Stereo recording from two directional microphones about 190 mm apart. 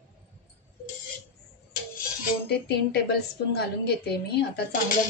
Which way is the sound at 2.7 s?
55° left (ahead or behind).